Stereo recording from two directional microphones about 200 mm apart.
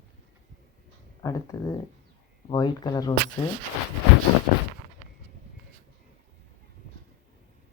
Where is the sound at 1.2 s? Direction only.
15° left (ahead or behind).